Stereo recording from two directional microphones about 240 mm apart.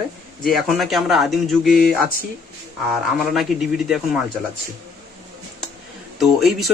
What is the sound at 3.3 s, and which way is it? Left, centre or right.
Speech, centre.